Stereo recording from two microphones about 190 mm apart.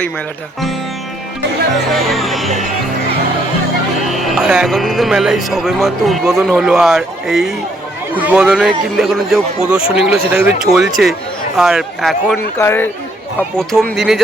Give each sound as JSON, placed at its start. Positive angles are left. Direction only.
{"t": 1.9, "sound": "speech", "side_deg": 0}
{"t": 4.2, "sound": "speech", "side_deg": 0}
{"t": 12.5, "sound": "speech", "side_deg": 10}